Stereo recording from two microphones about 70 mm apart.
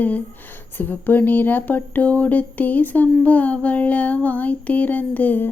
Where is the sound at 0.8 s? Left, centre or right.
Left.